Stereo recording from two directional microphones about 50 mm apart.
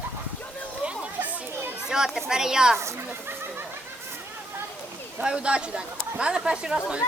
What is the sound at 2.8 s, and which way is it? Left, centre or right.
Speech, right.